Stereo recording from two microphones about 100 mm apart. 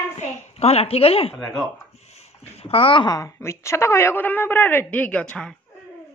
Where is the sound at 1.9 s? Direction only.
90° left; by 3.0 s 65° left (ahead or behind).